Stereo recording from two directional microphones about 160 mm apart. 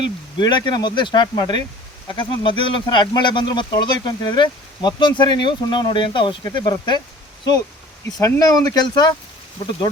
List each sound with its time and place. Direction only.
0.3 s speech: 25° left (ahead or behind)
8.2 s speech: 20° left (ahead or behind)